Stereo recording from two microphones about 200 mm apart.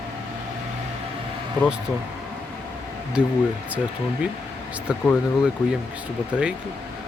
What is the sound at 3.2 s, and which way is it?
Speech, 5° right (ahead or behind).